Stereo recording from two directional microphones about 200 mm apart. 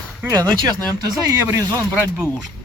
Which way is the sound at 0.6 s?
20° right (ahead or behind).